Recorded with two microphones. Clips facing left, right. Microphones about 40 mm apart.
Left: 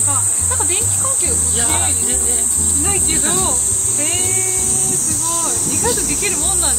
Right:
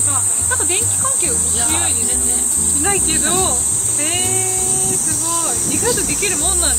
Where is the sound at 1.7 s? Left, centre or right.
Centre.